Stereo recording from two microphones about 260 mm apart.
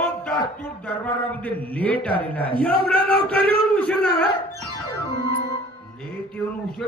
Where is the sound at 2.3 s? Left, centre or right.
Centre.